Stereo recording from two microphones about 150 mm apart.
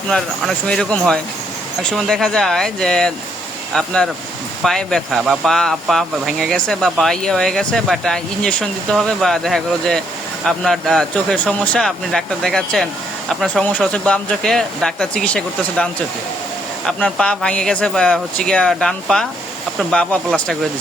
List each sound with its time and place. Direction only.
0.1 s speech: 5° left (ahead or behind)